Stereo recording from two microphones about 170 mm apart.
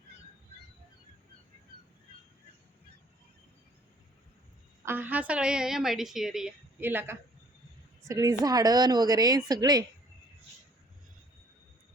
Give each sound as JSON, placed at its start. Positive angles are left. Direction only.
{"t": 4.9, "sound": "a woman's voice", "side_deg": -10}